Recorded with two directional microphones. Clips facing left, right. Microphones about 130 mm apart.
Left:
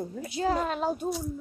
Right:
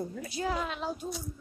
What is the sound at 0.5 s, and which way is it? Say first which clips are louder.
Speech: left 6 dB; 45° left (ahead or behind).